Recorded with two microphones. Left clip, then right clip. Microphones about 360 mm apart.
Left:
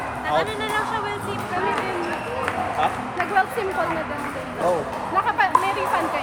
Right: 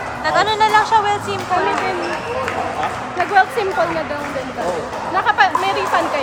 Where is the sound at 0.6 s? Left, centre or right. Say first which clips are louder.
Right 11 dB; centre.